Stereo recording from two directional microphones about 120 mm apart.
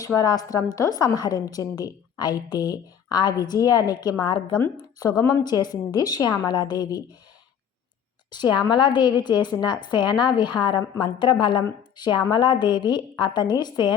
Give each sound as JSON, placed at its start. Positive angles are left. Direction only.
{"t": 0.0, "sound": "a woman's voice", "side_deg": 30}
{"t": 8.3, "sound": "a woman's voice", "side_deg": 40}